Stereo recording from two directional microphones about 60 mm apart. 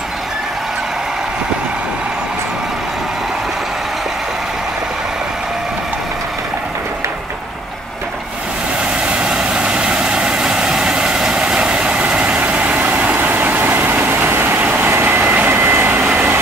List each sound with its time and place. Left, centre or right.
9.0 s vehicle: centre